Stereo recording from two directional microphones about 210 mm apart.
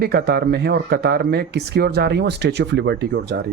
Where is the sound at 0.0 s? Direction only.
50° right (ahead or behind).